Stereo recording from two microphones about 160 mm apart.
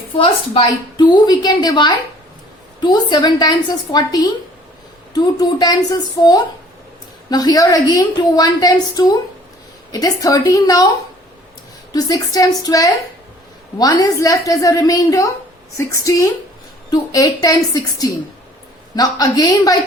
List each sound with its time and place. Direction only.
0.2 s a woman's voice: 30° left (ahead or behind)
11.9 s a woman's voice: 25° left (ahead or behind)